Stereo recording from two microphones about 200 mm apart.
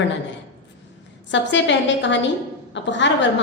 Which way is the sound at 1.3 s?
65° left (ahead or behind).